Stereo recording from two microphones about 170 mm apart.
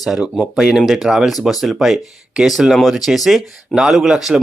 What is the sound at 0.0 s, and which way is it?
Speech, 5° right (ahead or behind).